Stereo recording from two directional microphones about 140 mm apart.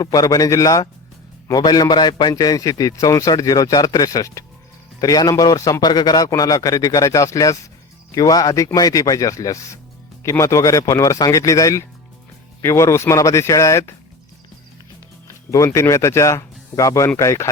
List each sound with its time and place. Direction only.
0.0 s a man's voice: 25° left (ahead or behind)
15.4 s a man's voice: 20° left (ahead or behind)